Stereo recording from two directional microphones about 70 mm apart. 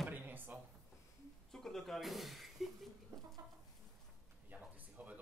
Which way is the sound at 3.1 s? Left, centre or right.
Right.